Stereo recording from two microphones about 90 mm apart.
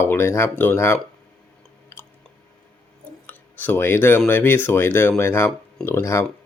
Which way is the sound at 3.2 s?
20° left (ahead or behind).